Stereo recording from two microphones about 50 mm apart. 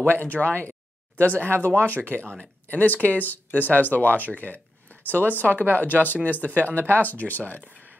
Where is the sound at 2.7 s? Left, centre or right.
Left.